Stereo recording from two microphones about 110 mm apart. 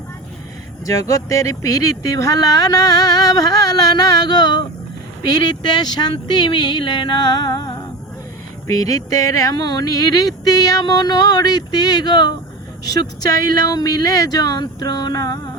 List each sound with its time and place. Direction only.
0.9 s speech: 30° left (ahead or behind)